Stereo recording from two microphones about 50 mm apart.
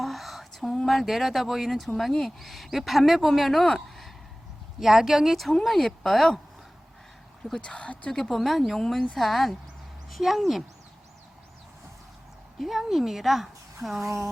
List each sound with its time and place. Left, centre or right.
0.0 s a sound: centre
2.2 s a man's voice: centre
7.6 s speech: left
8.1 s a man's voice: centre
12.5 s a man's voice: centre